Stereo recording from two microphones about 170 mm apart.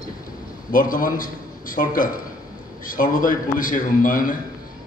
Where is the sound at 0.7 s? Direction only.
55° left (ahead or behind).